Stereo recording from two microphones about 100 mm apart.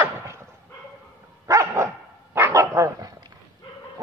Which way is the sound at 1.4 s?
30° right (ahead or behind).